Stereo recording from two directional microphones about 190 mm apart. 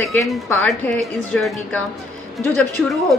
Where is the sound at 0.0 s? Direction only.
Centre (ahead or behind).